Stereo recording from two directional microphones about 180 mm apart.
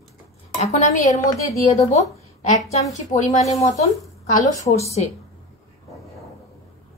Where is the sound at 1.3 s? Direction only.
20° left (ahead or behind).